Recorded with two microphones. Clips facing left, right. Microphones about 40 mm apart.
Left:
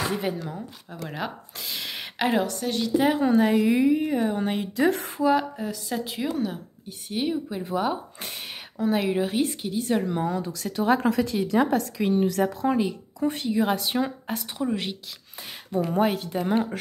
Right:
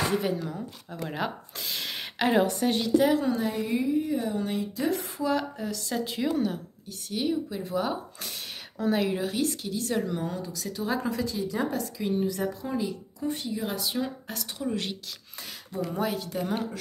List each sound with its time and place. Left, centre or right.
1.0 s a sound: centre
2.6 s a woman's voice: centre
3.1 s speech: left
3.5 s speech: left
4.3 s a woman's voice: left
4.6 s speech: left
5.2 s a sound: centre
5.6 s a woman's voice: centre
6.9 s speech: left
10.2 s speech: left
12.7 s speech: left
14.2 s speech: left
15.7 s a woman's voice: left
16.3 s speech: left